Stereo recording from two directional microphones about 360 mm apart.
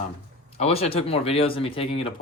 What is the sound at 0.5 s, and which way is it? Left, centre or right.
Speech, centre.